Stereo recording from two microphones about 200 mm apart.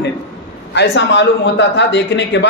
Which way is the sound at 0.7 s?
60° left (ahead or behind).